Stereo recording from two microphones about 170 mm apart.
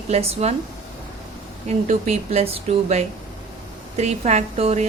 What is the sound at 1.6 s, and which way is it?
Speech, 40° right (ahead or behind).